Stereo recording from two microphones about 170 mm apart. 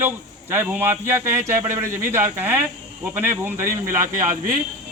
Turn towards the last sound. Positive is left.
turn(degrees=-50)  # may be behind; listen again after turning